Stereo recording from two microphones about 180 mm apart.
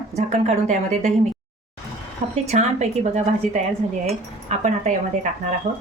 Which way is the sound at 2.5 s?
40° right (ahead or behind).